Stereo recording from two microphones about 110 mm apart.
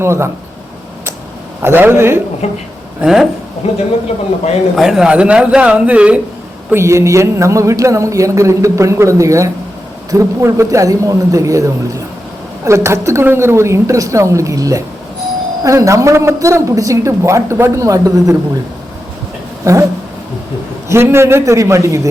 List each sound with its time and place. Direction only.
0.0 s a man's voice: 25° right (ahead or behind)
1.6 s a man's voice: 20° right (ahead or behind)
2.4 s speech: 75° left (ahead or behind)
3.0 s speech: 5° right (ahead or behind)
3.6 s speech: 65° left (ahead or behind)
4.8 s speech: 5° right (ahead or behind)
6.7 s a man's voice: 25° right (ahead or behind)
19.6 s a man's voice: 30° right (ahead or behind)
20.9 s a man's voice: 25° right (ahead or behind)